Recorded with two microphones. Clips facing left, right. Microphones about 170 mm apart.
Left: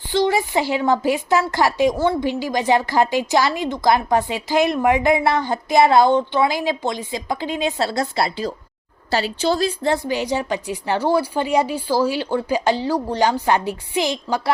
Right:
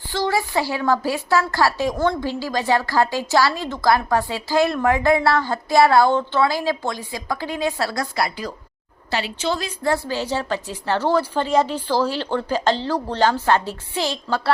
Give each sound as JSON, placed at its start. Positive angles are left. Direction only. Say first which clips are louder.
{"t": 0.1, "sound": "a woman's voice", "louder": "left 3 dB", "side_deg": 20}
{"t": 9.8, "sound": "a woman's voice", "louder": "left 2 dB", "side_deg": 20}